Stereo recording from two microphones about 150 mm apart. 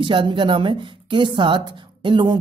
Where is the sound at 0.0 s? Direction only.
35° right (ahead or behind).